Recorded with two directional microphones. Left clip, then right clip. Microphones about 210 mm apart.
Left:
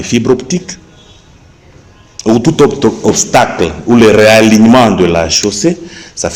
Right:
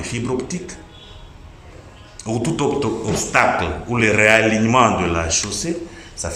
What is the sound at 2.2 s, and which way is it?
A man's voice, 40° left (ahead or behind).